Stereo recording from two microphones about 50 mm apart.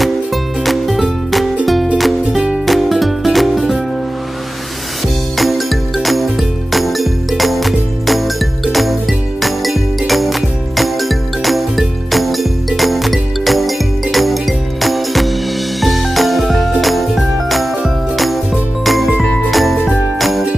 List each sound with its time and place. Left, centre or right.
0.7 s music: centre
5.4 s music: centre
9.4 s jingle bell: centre
10.8 s music: centre
19.5 s jingle: centre